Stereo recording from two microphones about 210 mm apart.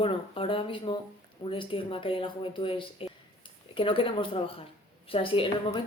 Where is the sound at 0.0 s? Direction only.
25° left (ahead or behind).